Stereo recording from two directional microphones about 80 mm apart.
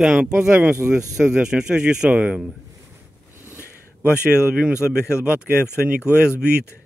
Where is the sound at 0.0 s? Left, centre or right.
Centre.